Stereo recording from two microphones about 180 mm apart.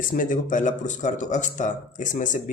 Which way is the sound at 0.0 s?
50° left (ahead or behind).